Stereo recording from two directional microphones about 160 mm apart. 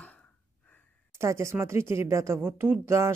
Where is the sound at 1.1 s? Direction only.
15° right (ahead or behind).